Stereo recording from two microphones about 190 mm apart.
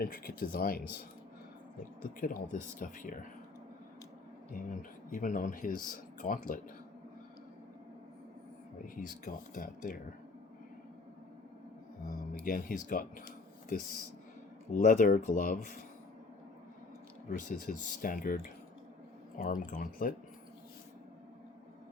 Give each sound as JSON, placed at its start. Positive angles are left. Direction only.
{"t": 0.0, "sound": "speech", "side_deg": 50}
{"t": 2.0, "sound": "speech", "side_deg": 45}
{"t": 4.5, "sound": "speech", "side_deg": 45}
{"t": 9.0, "sound": "speech", "side_deg": 45}
{"t": 12.3, "sound": "speech", "side_deg": 50}
{"t": 17.2, "sound": "speech", "side_deg": 45}